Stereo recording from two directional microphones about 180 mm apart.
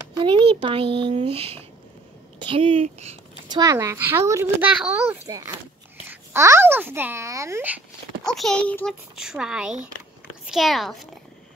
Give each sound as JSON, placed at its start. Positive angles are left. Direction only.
{"t": 0.1, "sound": "speech", "side_deg": -25}
{"t": 3.5, "sound": "a child's voice", "side_deg": -15}
{"t": 8.2, "sound": "a woman's voice", "side_deg": 0}